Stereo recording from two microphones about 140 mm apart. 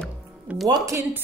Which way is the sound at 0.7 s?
35° right (ahead or behind).